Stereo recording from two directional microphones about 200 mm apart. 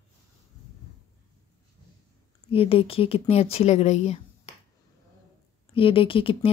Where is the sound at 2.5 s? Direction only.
30° left (ahead or behind).